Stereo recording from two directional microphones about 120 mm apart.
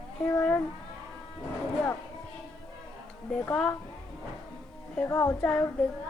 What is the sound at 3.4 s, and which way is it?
Speech, 10° left (ahead or behind).